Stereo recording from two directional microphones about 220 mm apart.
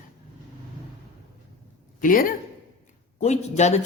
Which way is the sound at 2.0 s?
40° left (ahead or behind).